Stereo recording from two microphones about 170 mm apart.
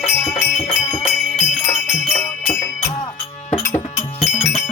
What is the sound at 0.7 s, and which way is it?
Music, 45° left (ahead or behind).